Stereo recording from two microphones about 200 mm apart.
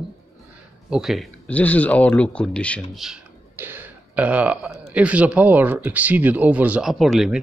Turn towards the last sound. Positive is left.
turn(degrees=0)  # may be behind; listen again after turning